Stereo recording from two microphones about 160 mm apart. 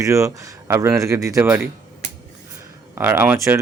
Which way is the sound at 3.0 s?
15° right (ahead or behind).